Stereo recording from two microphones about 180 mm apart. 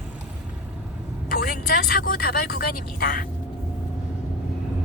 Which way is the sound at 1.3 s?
55° left (ahead or behind).